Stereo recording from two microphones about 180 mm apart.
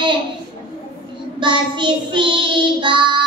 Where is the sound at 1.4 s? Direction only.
25° right (ahead or behind).